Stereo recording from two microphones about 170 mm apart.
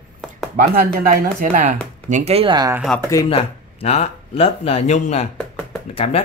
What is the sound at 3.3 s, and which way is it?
Speech, 35° left (ahead or behind).